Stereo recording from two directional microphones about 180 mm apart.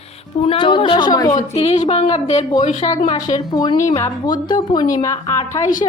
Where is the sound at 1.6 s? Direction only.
35° left (ahead or behind).